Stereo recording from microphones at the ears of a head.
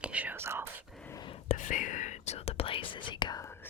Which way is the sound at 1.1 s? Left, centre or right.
Left.